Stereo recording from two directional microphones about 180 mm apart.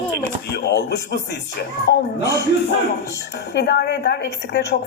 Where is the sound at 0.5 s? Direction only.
65° left (ahead or behind).